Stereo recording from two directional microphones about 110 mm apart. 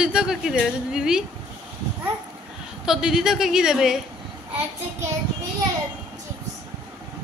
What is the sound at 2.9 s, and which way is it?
A woman's voice, 5° right (ahead or behind).